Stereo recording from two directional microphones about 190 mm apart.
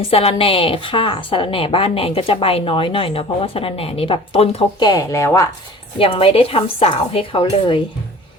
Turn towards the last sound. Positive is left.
turn(degrees=25)  # may be behind; listen again after turning